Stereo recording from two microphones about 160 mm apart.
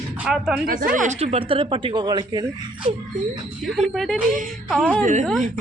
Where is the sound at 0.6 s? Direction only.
60° right (ahead or behind); by 2.7 s 30° right (ahead or behind).